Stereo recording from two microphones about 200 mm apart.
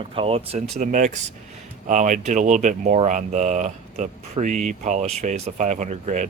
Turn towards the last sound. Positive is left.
turn(degrees=-35)  # may be behind; listen again after turning